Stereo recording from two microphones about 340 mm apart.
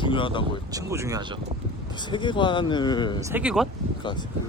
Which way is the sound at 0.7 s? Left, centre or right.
Centre.